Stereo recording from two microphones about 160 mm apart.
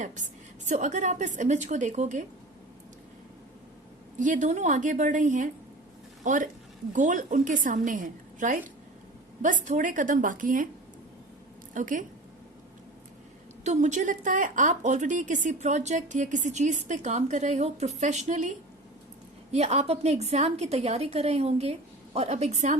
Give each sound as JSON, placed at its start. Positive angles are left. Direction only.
{"t": 0.0, "sound": "a woman's voice", "side_deg": -50}
{"t": 4.2, "sound": "a woman's voice", "side_deg": -50}
{"t": 11.7, "sound": "a woman's voice", "side_deg": -55}
{"t": 13.7, "sound": "a woman's voice", "side_deg": -50}